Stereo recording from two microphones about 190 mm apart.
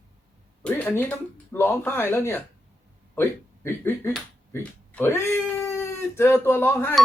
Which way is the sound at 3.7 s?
15° left (ahead or behind).